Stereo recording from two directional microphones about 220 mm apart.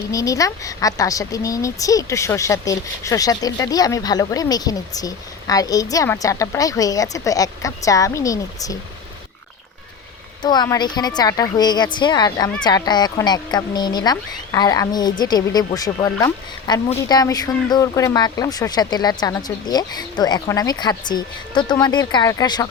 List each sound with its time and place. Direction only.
0.1 s speech: 15° left (ahead or behind)
10.4 s a woman's voice: 20° left (ahead or behind)